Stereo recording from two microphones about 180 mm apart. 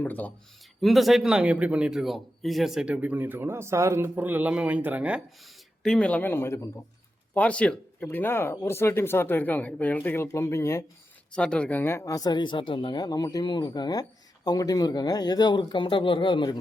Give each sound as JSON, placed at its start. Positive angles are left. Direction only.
{"t": 0.0, "sound": "a man's voice", "side_deg": 10}
{"t": 5.8, "sound": "speech", "side_deg": 5}